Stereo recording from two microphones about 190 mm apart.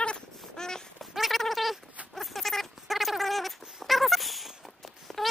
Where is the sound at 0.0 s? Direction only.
5° left (ahead or behind).